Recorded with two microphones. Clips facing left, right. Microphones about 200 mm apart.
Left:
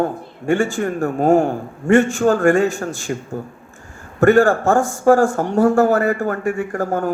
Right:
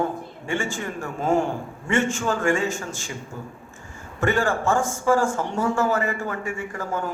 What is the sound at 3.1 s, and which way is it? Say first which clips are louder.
Speech: left 10 dB; 50° left (ahead or behind).